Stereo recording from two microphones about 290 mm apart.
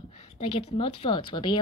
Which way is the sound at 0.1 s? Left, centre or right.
Left.